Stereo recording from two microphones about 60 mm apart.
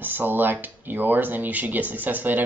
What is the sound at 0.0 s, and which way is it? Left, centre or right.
Speech, right.